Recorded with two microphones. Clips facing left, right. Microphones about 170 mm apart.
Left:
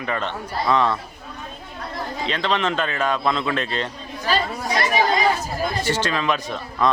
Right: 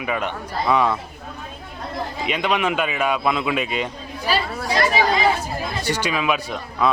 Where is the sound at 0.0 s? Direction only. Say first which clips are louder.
Right 1 dB; 10° right (ahead or behind).